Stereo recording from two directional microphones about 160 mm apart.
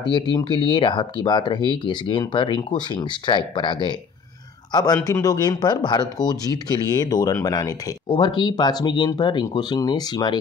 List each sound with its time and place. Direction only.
0.1 s speech: 30° left (ahead or behind)